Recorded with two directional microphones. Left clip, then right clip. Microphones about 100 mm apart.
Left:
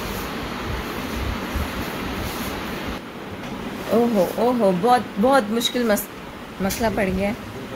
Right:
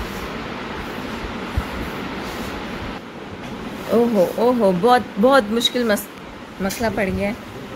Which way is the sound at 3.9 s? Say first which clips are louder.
Right 2 dB; 30° right (ahead or behind).